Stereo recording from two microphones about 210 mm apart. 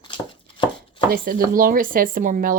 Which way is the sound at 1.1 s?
45° right (ahead or behind).